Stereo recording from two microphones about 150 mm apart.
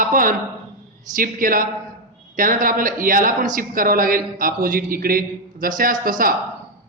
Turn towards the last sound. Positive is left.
turn(degrees=-65)  # may be behind; listen again after turning